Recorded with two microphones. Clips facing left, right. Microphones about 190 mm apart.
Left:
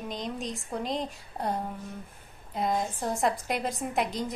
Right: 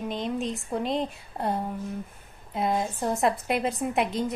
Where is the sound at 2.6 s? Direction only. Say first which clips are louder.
Right 2 dB; 5° right (ahead or behind).